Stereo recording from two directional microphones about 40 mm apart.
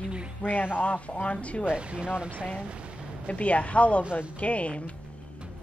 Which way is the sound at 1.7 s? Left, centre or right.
Right.